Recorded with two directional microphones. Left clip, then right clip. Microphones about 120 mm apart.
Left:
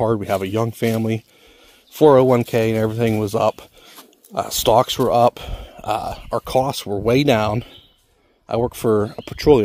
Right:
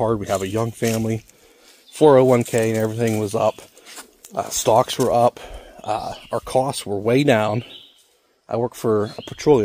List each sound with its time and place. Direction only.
0.0 s speech: 35° left (ahead or behind)
2.0 s speech: 25° left (ahead or behind)
2.5 s speech: 35° left (ahead or behind)
6.4 s speech: 30° left (ahead or behind)
8.5 s speech: 50° left (ahead or behind)